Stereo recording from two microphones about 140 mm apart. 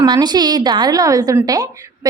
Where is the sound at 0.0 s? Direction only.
30° right (ahead or behind).